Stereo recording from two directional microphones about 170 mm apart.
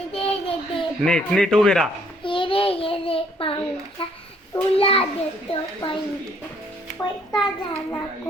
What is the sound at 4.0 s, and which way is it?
A child's voice, 30° left (ahead or behind).